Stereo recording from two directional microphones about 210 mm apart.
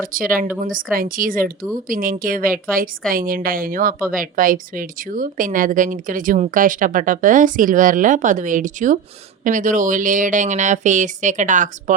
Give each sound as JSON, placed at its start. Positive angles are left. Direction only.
{"t": 0.0, "sound": "a woman's voice", "side_deg": -40}